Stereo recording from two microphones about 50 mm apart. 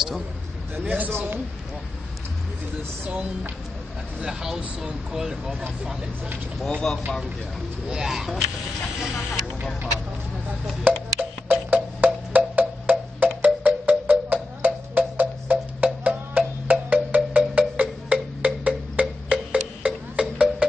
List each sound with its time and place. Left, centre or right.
0.8 s a man's voice: right
1.1 s a man's voice: right
4.2 s speech: centre
6.6 s speech: centre
7.9 s speech: centre
10.8 s music: right